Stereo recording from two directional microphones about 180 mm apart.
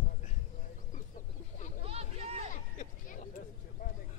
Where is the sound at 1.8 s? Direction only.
35° right (ahead or behind).